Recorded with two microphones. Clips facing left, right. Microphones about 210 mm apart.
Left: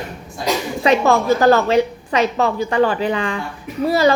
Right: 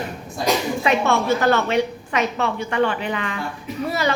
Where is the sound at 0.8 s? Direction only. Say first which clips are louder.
Left 4 dB; 35° left (ahead or behind).